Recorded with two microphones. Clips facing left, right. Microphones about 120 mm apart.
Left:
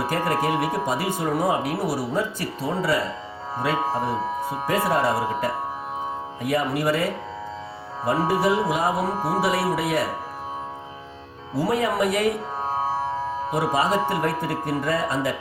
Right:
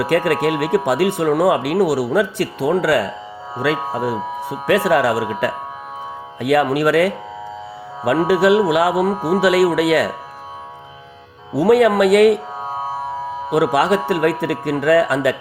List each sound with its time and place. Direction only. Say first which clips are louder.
0.1 s speech: right 7 dB; 70° right (ahead or behind)
3.6 s speech: right 5 dB; 90° right
4.1 s speech: right 2 dB; 5° right (ahead or behind)
4.6 s speech: right 7 dB; 75° right (ahead or behind)
8.3 s speech: right 10 dB; 75° right (ahead or behind)
9.1 s speech: right 6 dB; centre (ahead or behind)
9.4 s speech: right 10 dB; 75° right (ahead or behind)
11.5 s speech: right 10 dB; 70° right (ahead or behind)
12.6 s music: left 4 dB; centre (ahead or behind)
13.5 s speech: right 7 dB; 70° right (ahead or behind)